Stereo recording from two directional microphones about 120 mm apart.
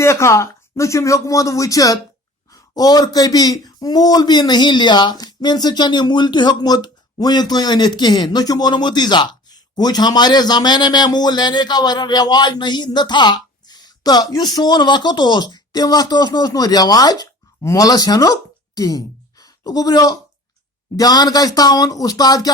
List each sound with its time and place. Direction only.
0.0 s speech: 25° left (ahead or behind)